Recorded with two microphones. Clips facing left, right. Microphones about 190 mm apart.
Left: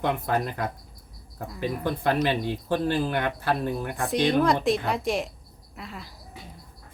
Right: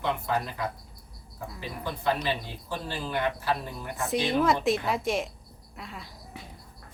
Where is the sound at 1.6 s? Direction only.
55° left (ahead or behind).